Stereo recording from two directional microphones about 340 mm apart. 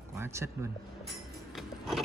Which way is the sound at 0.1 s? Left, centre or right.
Centre.